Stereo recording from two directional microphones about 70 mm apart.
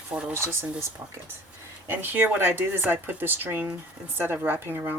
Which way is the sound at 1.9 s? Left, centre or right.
Right.